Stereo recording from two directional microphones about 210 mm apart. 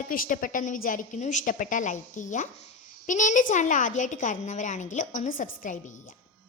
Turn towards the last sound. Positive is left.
turn(degrees=35)  # may be behind; listen again after turning